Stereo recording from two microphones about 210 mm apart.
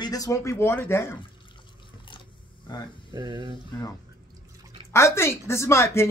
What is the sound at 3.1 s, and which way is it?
Speech, 20° right (ahead or behind).